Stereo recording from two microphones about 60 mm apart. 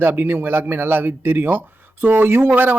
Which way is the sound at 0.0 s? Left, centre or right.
Right.